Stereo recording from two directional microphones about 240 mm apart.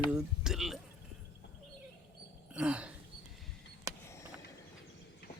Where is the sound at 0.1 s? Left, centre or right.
Centre.